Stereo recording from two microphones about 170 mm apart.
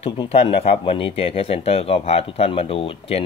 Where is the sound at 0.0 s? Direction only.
35° left (ahead or behind).